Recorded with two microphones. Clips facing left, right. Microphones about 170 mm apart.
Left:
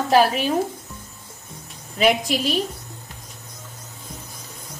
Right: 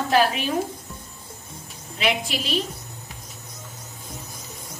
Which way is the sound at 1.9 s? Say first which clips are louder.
Left 6 dB; 40° left (ahead or behind).